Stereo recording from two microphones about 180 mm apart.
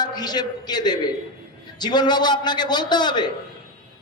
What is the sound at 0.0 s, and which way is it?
A man's voice, 20° left (ahead or behind).